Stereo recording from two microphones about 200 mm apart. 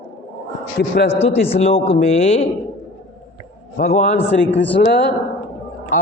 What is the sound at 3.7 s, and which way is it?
Speech, 40° left (ahead or behind).